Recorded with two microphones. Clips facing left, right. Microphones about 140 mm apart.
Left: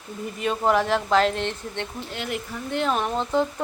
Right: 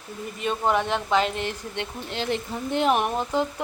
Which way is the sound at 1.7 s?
15° right (ahead or behind).